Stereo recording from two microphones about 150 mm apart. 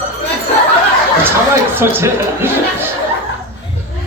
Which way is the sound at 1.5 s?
15° right (ahead or behind).